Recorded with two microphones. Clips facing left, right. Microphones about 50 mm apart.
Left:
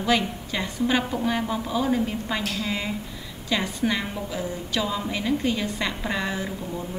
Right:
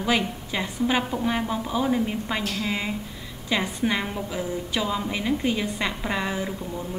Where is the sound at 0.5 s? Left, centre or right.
Centre.